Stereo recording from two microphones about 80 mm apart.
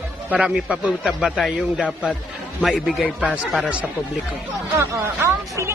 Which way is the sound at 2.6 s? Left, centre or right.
Centre.